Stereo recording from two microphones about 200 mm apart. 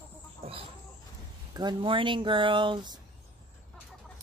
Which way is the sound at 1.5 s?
25° right (ahead or behind).